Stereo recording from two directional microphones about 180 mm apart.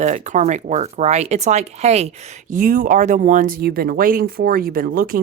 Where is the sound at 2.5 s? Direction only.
50° right (ahead or behind).